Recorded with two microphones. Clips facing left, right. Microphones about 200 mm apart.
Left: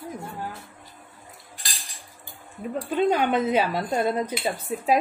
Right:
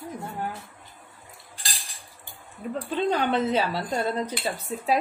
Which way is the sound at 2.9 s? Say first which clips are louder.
Left 3 dB; 10° left (ahead or behind).